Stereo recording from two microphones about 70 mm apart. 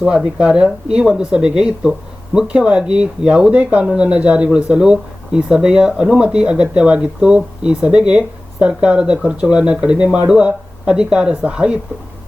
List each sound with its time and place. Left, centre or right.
0.0 s speech: centre